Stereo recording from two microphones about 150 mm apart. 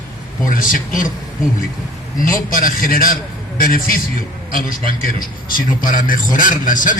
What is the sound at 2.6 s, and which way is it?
A man's voice, 75° left (ahead or behind).